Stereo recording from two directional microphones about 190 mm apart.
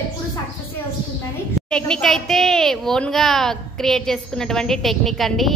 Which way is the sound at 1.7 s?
5° left (ahead or behind).